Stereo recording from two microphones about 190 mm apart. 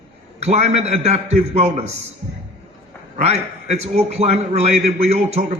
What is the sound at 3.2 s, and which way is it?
A man's voice, 35° right (ahead or behind).